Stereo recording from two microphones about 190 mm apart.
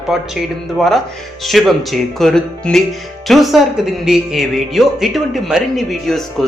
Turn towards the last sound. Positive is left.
turn(degrees=0)  # may be behind; listen again after turning